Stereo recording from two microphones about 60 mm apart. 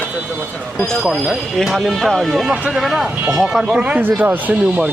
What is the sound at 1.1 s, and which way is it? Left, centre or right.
Speech, centre.